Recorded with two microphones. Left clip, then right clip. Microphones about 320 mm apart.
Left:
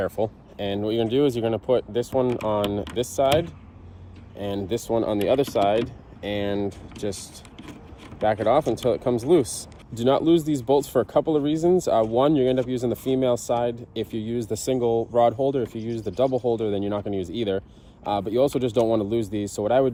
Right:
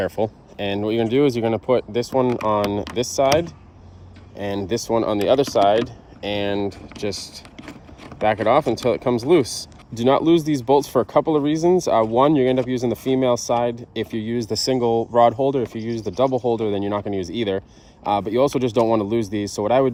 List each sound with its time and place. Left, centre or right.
0.0 s speech: right